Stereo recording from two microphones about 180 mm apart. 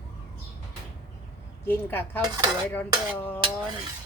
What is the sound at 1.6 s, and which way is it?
Speech, 10° left (ahead or behind).